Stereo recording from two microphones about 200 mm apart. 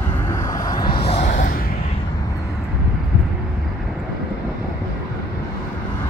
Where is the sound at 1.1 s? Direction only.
40° left (ahead or behind).